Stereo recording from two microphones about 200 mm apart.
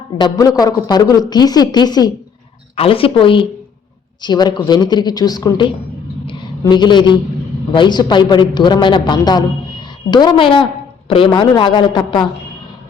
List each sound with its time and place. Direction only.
0.2 s a woman's voice: 15° left (ahead or behind)